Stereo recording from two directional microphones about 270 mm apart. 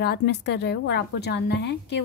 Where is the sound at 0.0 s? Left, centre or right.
Left.